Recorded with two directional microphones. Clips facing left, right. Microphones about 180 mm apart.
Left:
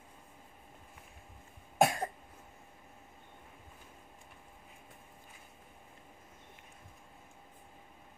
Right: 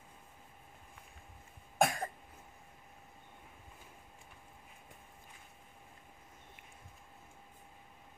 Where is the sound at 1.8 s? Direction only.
20° left (ahead or behind).